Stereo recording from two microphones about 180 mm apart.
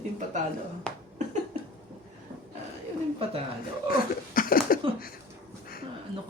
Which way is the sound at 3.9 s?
50° left (ahead or behind).